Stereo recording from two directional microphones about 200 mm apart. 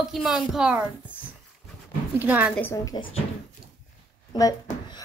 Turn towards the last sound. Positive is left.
turn(degrees=20)  # may be behind; listen again after turning